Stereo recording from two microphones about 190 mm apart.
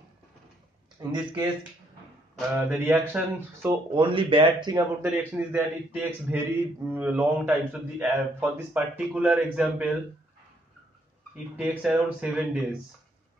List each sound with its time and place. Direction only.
0.9 s speech: 20° right (ahead or behind)
2.6 s a man's voice: 10° right (ahead or behind)
3.9 s a man's voice: 25° right (ahead or behind); by 9.9 s 5° right (ahead or behind)
11.3 s speech: 5° right (ahead or behind)